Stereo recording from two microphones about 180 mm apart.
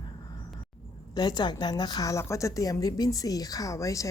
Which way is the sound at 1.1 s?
25° left (ahead or behind).